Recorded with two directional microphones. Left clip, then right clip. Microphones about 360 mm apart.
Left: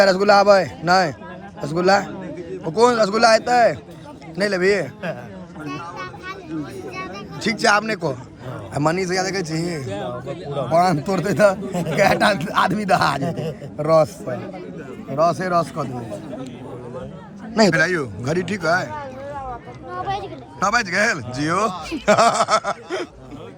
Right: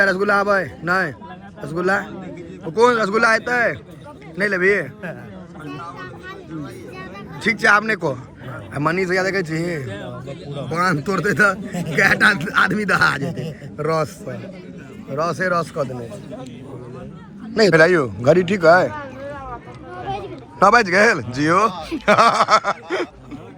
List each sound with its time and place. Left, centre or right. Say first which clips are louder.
0.0 s speech: left 3 dB; centre
6.9 s a sound: left 3 dB; centre
8.7 s speech: right 1 dB; centre
17.5 s speech: right 4 dB; centre
18.9 s a sound: right 1 dB; left
20.6 s speech: right 6 dB; centre